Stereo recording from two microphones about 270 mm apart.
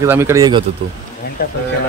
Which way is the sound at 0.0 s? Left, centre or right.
Centre.